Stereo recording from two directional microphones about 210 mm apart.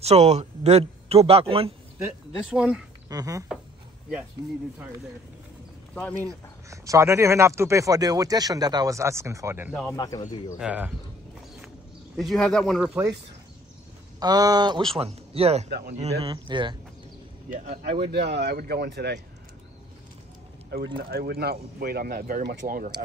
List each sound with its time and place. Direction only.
0.0 s speech: 30° right (ahead or behind)
2.3 s speech: 5° right (ahead or behind)
3.1 s speech: 15° right (ahead or behind)
5.9 s speech: 10° left (ahead or behind)
6.2 s speech: 15° right (ahead or behind)
9.9 s speech: 20° left (ahead or behind)
10.6 s speech: 5° right (ahead or behind)
12.2 s speech: centre (ahead or behind)
14.2 s speech: 20° right (ahead or behind)
15.7 s speech: 40° right (ahead or behind)
18.1 s speech: 50° right (ahead or behind)
20.7 s speech: 45° right (ahead or behind)